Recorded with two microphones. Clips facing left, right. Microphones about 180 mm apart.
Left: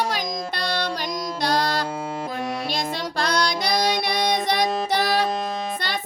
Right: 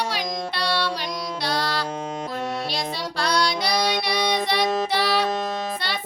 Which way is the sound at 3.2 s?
45° left (ahead or behind).